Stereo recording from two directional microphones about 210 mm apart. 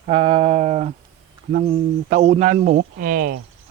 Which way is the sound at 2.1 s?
35° right (ahead or behind).